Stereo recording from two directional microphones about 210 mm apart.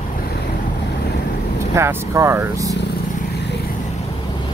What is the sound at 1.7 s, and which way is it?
Speech, 10° right (ahead or behind).